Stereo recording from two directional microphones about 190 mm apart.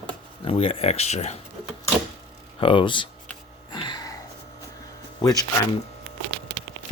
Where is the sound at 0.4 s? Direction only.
30° left (ahead or behind).